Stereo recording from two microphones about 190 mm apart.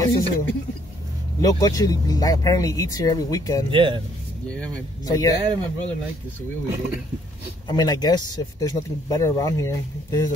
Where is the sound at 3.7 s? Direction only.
25° right (ahead or behind).